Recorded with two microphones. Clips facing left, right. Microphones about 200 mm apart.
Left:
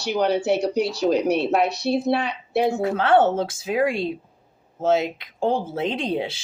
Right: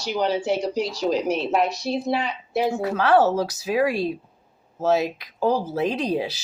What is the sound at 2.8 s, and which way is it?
Speech, 25° left (ahead or behind).